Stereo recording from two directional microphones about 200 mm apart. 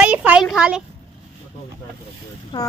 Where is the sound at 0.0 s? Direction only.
5° right (ahead or behind).